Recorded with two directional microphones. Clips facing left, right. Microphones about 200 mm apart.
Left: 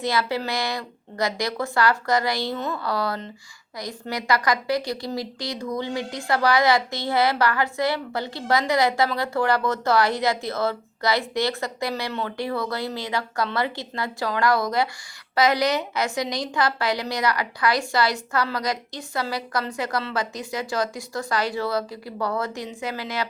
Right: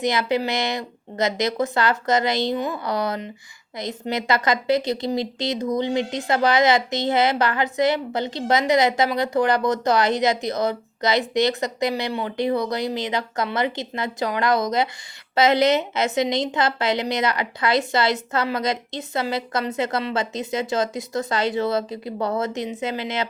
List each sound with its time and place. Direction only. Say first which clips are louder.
0.0 s a woman's voice: right 3 dB; 20° right (ahead or behind)